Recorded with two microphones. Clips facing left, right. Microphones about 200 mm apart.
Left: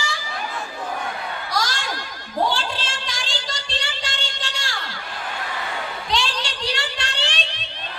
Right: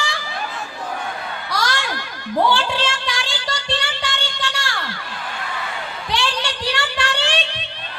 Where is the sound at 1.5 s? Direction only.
60° right (ahead or behind).